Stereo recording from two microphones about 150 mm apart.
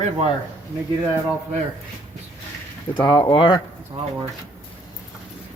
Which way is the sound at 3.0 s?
30° left (ahead or behind).